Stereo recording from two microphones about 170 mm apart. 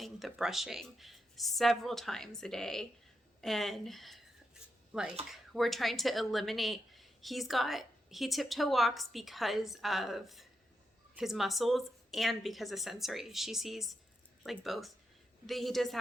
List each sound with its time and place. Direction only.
0.0 s a woman's voice: centre (ahead or behind)